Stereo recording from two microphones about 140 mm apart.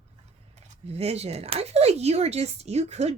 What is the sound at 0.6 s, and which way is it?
Speech, 45° right (ahead or behind).